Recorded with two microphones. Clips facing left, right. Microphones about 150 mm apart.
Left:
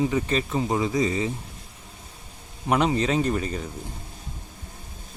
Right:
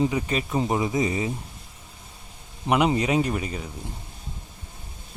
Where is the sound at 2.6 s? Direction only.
10° right (ahead or behind).